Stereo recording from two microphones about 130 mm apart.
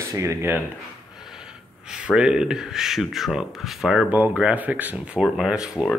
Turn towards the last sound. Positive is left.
turn(degrees=-5)  # may be behind; listen again after turning